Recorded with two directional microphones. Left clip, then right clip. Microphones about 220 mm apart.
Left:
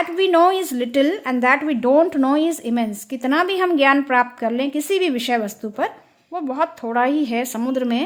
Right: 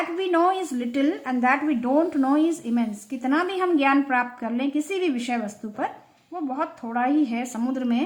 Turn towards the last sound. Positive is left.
turn(degrees=35)  # may be behind; listen again after turning